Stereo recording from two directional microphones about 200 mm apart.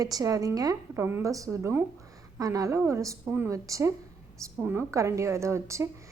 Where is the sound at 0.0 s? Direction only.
15° right (ahead or behind).